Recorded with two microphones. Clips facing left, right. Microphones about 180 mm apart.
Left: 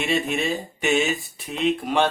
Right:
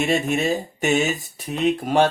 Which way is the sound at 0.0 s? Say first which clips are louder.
Right 3 dB; 45° right (ahead or behind).